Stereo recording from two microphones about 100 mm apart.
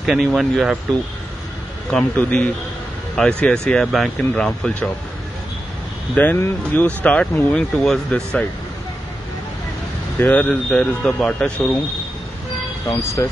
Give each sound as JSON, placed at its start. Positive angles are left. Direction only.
{"t": 0.0, "sound": "speech", "side_deg": -5}
{"t": 1.9, "sound": "speech", "side_deg": 10}
{"t": 6.1, "sound": "speech", "side_deg": 20}
{"t": 10.1, "sound": "speech", "side_deg": 15}
{"t": 12.8, "sound": "speech", "side_deg": 35}